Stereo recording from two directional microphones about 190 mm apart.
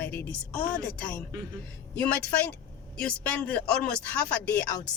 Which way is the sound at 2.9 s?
5° left (ahead or behind).